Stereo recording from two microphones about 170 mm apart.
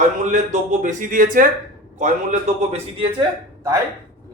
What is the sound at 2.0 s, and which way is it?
A man's voice, 45° right (ahead or behind).